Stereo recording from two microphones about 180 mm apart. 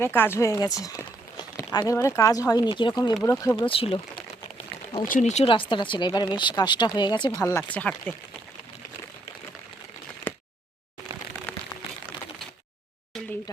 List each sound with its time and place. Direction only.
0.0 s speech: 15° left (ahead or behind)
3.7 s speech: 30° left (ahead or behind)
5.0 s speech: 45° left (ahead or behind); by 8.1 s 10° left (ahead or behind)